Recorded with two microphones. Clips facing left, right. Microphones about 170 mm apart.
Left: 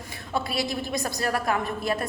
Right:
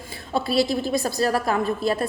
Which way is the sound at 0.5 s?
15° left (ahead or behind).